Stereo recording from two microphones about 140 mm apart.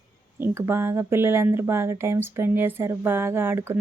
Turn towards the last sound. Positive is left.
turn(degrees=-15)  # may be behind; listen again after turning